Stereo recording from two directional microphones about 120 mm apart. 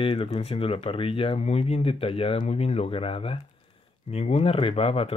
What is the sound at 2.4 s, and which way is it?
Speech, 60° left (ahead or behind).